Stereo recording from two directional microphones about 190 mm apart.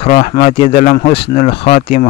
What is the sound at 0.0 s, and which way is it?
A man's voice, 35° left (ahead or behind).